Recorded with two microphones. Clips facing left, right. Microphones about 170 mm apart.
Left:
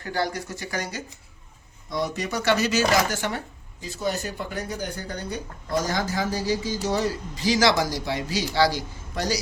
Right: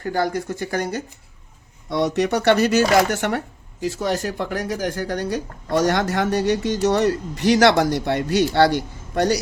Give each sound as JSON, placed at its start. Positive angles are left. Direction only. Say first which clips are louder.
{"t": 0.0, "sound": "speech", "louder": "right 5 dB", "side_deg": -50}
{"t": 1.9, "sound": "speech", "louder": "right 8 dB", "side_deg": -70}